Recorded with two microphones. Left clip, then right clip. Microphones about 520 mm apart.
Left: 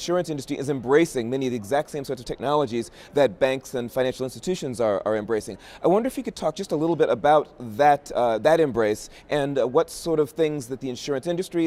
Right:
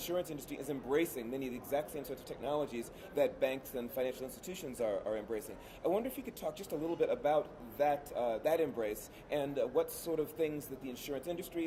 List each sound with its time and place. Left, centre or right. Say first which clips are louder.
0.0 s a man's voice: left 13 dB; left